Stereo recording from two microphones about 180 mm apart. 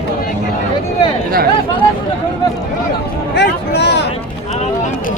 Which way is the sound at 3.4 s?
70° left (ahead or behind).